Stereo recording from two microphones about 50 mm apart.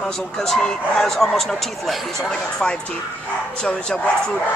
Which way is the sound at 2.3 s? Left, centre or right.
Centre.